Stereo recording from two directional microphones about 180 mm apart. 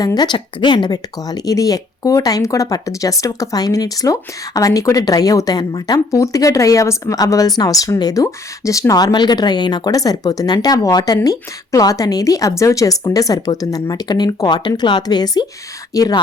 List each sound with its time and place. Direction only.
0.0 s speech: 20° left (ahead or behind)